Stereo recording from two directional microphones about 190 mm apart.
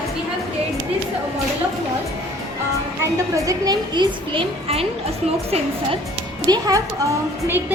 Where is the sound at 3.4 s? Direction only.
20° right (ahead or behind).